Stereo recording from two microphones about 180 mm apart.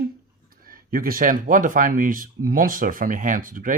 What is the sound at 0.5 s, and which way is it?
Speech, 55° right (ahead or behind).